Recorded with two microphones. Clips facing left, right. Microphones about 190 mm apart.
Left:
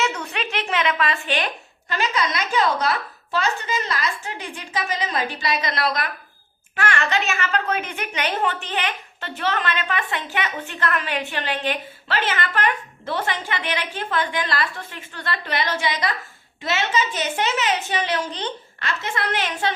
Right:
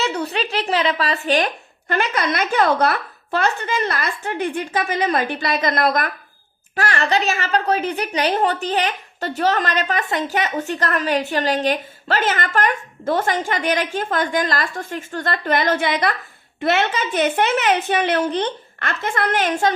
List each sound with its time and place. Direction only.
0.0 s a sound: 35° right (ahead or behind)
1.9 s a woman's voice: 55° right (ahead or behind)
6.7 s a woman's voice: 35° right (ahead or behind)